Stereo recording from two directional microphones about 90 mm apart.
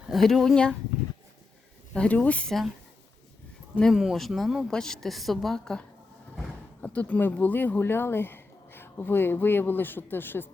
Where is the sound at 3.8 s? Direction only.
5° right (ahead or behind).